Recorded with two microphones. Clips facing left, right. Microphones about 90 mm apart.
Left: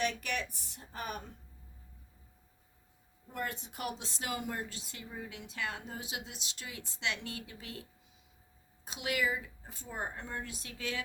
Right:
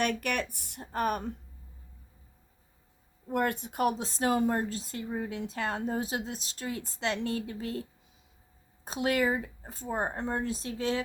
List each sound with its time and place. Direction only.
0.0 s speech: 55° right (ahead or behind)
3.2 s a woman's voice: 60° right (ahead or behind); by 11.0 s 30° right (ahead or behind)